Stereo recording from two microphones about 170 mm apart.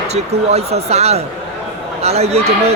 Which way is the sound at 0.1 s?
40° right (ahead or behind).